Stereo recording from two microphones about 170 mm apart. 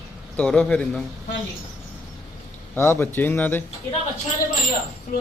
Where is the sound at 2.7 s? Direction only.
15° left (ahead or behind).